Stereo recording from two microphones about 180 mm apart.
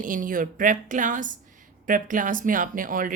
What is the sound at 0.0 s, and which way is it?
A woman's voice, 50° right (ahead or behind).